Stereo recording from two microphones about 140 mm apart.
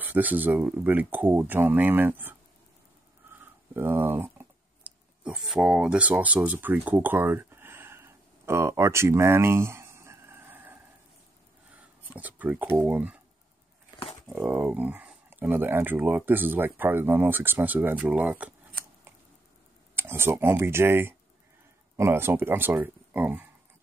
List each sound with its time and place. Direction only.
0.0 s speech: 10° right (ahead or behind)
3.3 s a sound: 15° right (ahead or behind)
12.1 s speech: 10° right (ahead or behind)
14.3 s speech: 15° right (ahead or behind)
20.0 s speech: 15° right (ahead or behind)